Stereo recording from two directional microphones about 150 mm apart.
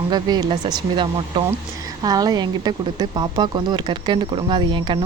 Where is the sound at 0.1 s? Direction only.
25° right (ahead or behind).